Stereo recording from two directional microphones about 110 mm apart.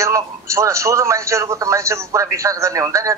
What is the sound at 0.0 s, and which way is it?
A man's voice, 25° right (ahead or behind).